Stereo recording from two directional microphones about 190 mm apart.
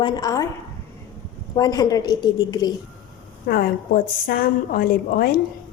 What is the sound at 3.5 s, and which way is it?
A woman's voice, 50° left (ahead or behind).